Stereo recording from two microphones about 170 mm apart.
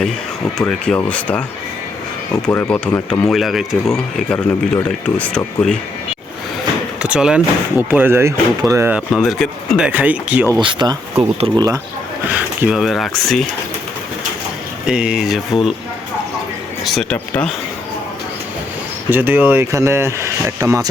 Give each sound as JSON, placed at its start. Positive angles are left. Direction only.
{"t": 0.7, "sound": "speech", "side_deg": 5}
{"t": 7.0, "sound": "speech", "side_deg": -5}
{"t": 10.6, "sound": "speech", "side_deg": -25}
{"t": 12.3, "sound": "speech", "side_deg": -5}
{"t": 14.8, "sound": "speech", "side_deg": -5}
{"t": 16.8, "sound": "speech", "side_deg": 0}
{"t": 19.1, "sound": "speech", "side_deg": -10}